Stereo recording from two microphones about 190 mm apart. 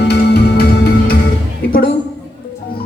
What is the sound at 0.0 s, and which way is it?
Music, 60° left (ahead or behind).